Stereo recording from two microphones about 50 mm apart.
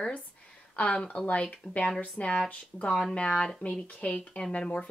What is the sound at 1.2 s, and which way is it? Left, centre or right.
Speech, left.